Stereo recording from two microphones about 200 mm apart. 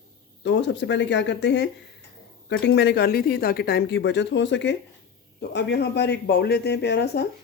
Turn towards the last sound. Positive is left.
turn(degrees=55)  # may be behind; listen again after turning